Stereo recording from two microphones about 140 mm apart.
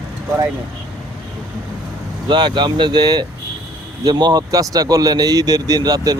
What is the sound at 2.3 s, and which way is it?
Speech, 35° right (ahead or behind).